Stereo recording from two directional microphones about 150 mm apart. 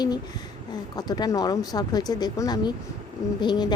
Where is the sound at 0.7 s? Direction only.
25° left (ahead or behind).